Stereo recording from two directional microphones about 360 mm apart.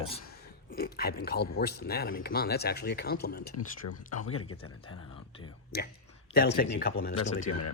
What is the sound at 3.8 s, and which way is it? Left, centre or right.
Speech, left.